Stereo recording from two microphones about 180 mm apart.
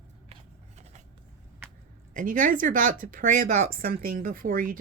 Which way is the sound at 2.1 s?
50° right (ahead or behind).